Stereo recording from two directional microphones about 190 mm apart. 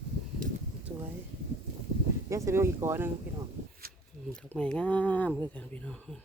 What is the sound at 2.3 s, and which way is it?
Speech, 15° right (ahead or behind).